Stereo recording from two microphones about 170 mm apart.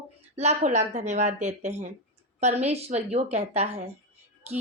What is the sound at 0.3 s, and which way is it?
Speech, 40° right (ahead or behind).